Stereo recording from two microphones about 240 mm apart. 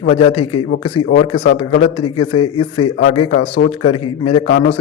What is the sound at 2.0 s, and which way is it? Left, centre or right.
Speech, left.